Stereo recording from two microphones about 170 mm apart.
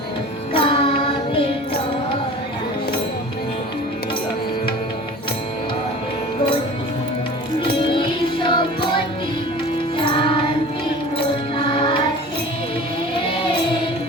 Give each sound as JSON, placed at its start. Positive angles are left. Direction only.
{"t": 0.5, "sound": "carnatic music", "side_deg": 30}
{"t": 7.7, "sound": "music", "side_deg": 30}
{"t": 10.0, "sound": "music", "side_deg": 30}
{"t": 11.5, "sound": "music", "side_deg": 30}